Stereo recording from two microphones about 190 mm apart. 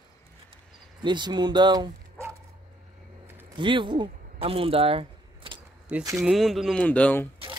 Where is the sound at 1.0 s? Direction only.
25° right (ahead or behind).